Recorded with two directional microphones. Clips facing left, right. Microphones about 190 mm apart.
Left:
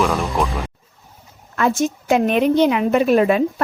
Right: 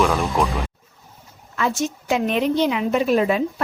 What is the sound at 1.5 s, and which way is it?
A woman's voice, 50° left (ahead or behind).